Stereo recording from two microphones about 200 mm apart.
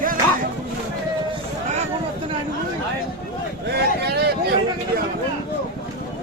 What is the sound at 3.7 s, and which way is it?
Vehicle, 55° right (ahead or behind).